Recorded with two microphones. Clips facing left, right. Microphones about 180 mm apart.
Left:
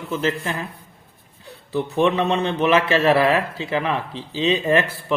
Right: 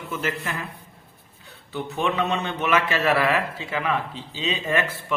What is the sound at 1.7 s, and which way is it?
A man's voice, 35° left (ahead or behind).